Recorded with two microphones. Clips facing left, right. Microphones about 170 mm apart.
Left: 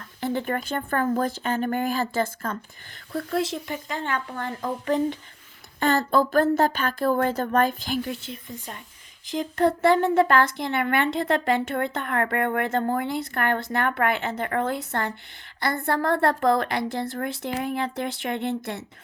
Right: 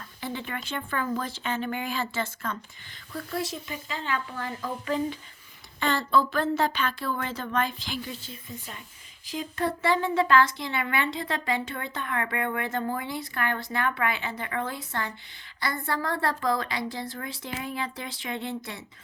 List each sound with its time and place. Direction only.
0.2 s a woman's voice: 55° left (ahead or behind)
3.1 s a woman's voice: 60° left (ahead or behind)
9.4 s a woman's voice: 55° left (ahead or behind)